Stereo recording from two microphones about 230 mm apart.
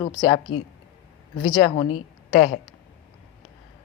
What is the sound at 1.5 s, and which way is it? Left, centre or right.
Speech, left.